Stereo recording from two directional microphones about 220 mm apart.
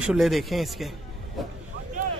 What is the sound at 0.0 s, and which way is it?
Speech, centre (ahead or behind).